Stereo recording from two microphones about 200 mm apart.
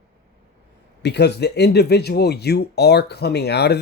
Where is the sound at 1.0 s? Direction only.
55° left (ahead or behind).